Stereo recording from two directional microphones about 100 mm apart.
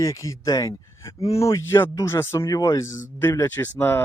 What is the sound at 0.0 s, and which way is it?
Speech, 35° left (ahead or behind).